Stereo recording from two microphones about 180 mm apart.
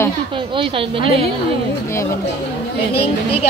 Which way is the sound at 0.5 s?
30° right (ahead or behind).